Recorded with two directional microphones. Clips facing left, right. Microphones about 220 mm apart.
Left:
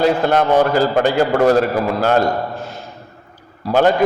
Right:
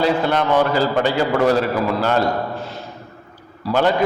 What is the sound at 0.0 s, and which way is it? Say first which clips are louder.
A man's voice: left 3 dB; 45° left (ahead or behind).